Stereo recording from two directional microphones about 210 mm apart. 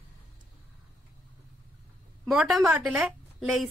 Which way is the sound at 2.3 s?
Centre (ahead or behind).